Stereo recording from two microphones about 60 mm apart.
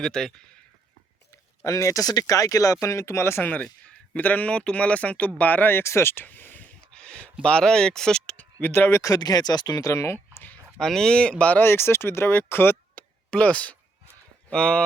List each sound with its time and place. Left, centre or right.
0.0 s speech: centre
1.3 s speech: left
2.8 s speech: left
3.4 s speech: left
5.8 s speech: left
6.2 s a sound: left
6.9 s a sound: centre
7.4 s speech: centre
8.6 s speech: left
9.0 s speech: left
10.8 s speech: centre
11.6 s speech: left
13.0 s a sound: left
14.5 s speech: centre